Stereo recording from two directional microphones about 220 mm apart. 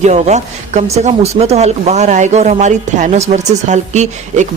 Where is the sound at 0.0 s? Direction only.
30° right (ahead or behind).